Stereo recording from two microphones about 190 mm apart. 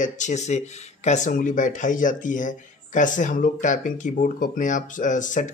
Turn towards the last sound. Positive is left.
turn(degrees=40)  # may be behind; listen again after turning